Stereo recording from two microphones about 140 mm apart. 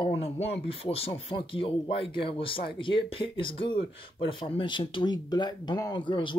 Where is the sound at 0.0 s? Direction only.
45° left (ahead or behind).